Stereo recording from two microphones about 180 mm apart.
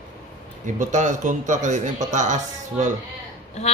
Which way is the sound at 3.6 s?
40° left (ahead or behind).